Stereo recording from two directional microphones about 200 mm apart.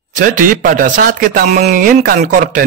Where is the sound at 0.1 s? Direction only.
40° right (ahead or behind).